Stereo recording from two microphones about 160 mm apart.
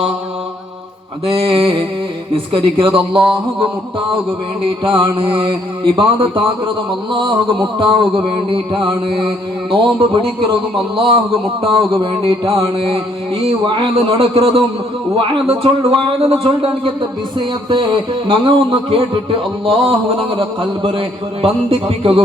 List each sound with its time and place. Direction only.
1.2 s mantra: 35° right (ahead or behind)
4.8 s mantra: 30° right (ahead or behind)
11.6 s mantra: 35° right (ahead or behind)